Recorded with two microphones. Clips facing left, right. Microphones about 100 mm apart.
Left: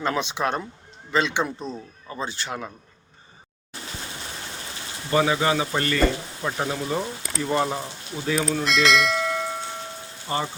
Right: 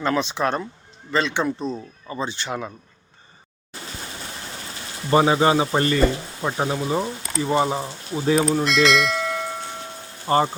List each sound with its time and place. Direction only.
0.0 s speech: 10° left (ahead or behind)
2.0 s speech: centre (ahead or behind)
5.1 s speech: 30° right (ahead or behind); by 7.8 s 5° right (ahead or behind)
7.8 s speech: 30° right (ahead or behind)
8.6 s bell: centre (ahead or behind)
10.2 s speech: 45° right (ahead or behind)